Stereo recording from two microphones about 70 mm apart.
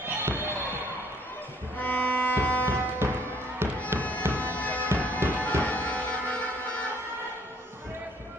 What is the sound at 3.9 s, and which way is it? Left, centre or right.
Music, left.